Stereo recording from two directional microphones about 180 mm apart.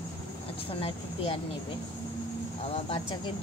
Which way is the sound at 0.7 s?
30° left (ahead or behind).